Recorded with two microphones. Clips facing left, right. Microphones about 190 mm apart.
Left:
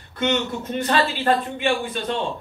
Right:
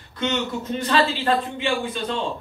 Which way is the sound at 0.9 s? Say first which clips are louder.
Even; 55° left (ahead or behind).